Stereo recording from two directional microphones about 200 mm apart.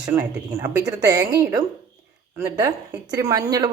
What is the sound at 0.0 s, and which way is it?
A woman's voice, 15° right (ahead or behind).